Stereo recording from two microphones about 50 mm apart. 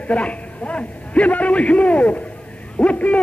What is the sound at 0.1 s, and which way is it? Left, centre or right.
A man's voice, left.